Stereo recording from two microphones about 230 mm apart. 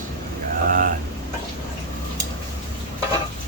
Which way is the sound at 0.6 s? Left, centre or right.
Right.